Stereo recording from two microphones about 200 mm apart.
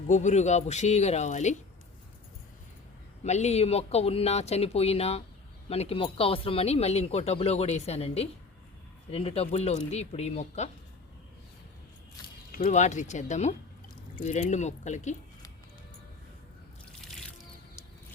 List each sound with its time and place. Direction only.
0.1 s speech: 35° left (ahead or behind)
3.2 s speech: 35° left (ahead or behind)
12.5 s speech: 40° left (ahead or behind)
17.0 s music: centre (ahead or behind)